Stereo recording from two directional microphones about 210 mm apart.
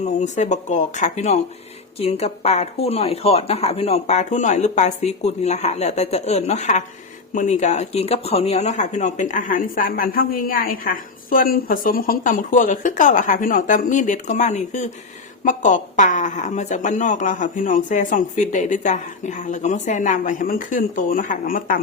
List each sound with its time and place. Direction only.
0.0 s speech: 35° left (ahead or behind)